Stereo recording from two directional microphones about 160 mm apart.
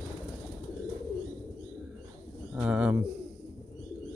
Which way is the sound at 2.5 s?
10° right (ahead or behind).